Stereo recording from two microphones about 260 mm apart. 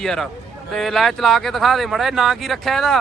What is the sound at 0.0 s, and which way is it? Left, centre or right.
Speech, centre.